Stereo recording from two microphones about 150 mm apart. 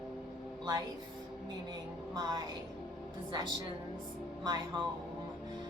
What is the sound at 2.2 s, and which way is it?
Speech, 30° right (ahead or behind).